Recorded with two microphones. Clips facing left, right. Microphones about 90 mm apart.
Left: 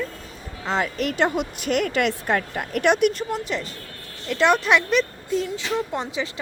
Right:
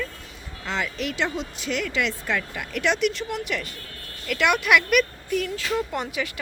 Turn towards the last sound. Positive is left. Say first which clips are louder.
# left 1 dB
turn(degrees=25)  # may be behind; listen again after turning